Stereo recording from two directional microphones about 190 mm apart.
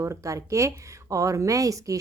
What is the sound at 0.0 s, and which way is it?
Speech, 15° right (ahead or behind).